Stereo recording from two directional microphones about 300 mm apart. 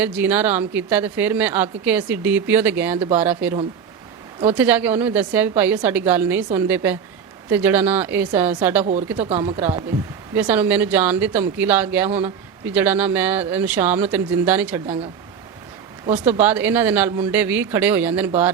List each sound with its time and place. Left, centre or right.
0.0 s speech: centre
8.8 s speech: right
10.3 s speech: centre
16.2 s speech: centre